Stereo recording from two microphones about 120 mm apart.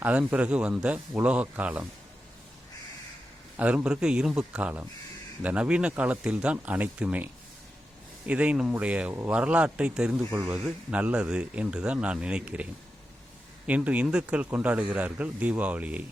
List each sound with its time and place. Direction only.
0.0 s speech: 10° right (ahead or behind)
3.6 s speech: 10° right (ahead or behind)
8.3 s speech: 10° right (ahead or behind)
10.4 s a man's voice: 20° right (ahead or behind)